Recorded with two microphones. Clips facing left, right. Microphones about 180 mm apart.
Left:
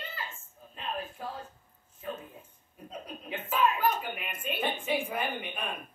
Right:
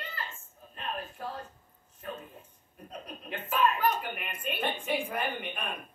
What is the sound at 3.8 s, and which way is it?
A woman's voice, 10° left (ahead or behind).